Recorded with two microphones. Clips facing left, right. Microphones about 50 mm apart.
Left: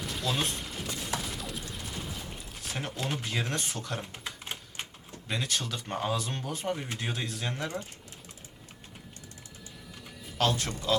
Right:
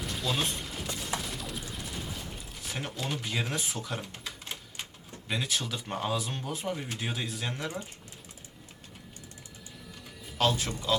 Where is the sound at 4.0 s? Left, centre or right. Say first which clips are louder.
Left 1 dB; left.